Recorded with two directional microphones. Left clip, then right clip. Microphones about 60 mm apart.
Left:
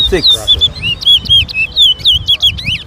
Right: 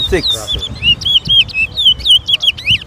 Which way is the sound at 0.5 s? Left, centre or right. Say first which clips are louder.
Left 1 dB; right.